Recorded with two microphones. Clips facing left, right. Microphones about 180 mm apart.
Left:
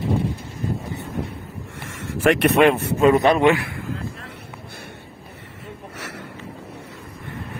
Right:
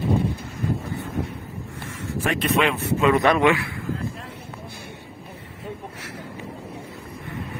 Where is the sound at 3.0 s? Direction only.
40° left (ahead or behind).